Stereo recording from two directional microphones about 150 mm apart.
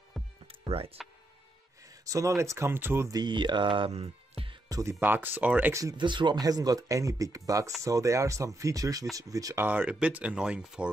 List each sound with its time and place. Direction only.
0.2 s music: centre (ahead or behind)
0.5 s music: 40° right (ahead or behind)
2.0 s speech: 20° right (ahead or behind); by 4.6 s 40° right (ahead or behind)
4.6 s music: 25° right (ahead or behind)
5.0 s speech: 10° right (ahead or behind)
9.7 s speech: 10° right (ahead or behind)